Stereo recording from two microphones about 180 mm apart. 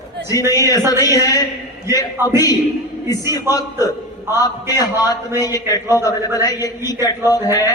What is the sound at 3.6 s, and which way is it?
A man's voice, 20° left (ahead or behind).